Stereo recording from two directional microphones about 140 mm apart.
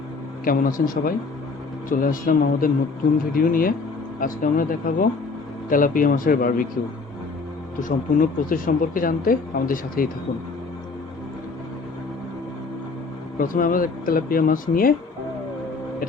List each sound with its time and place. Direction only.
0.4 s speech: 80° left
4.2 s speech: 75° left (ahead or behind)
7.8 s speech: 70° left (ahead or behind)
13.4 s speech: 80° left